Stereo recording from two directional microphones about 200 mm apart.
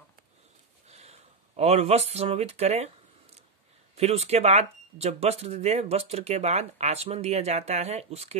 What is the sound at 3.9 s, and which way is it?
Speech, 30° right (ahead or behind).